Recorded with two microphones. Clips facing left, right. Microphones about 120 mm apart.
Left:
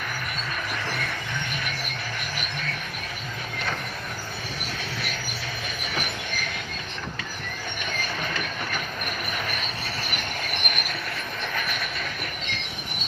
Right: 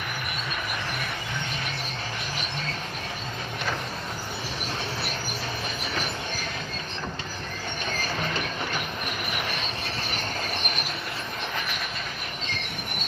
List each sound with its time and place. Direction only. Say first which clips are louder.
7.9 s train: right 1 dB; 35° right (ahead or behind)
10.1 s train: right 1 dB; 30° right (ahead or behind)